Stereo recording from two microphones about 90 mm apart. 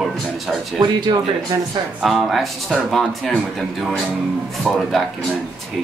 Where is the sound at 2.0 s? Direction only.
Centre (ahead or behind).